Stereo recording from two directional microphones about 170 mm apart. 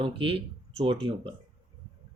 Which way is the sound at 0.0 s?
30° right (ahead or behind).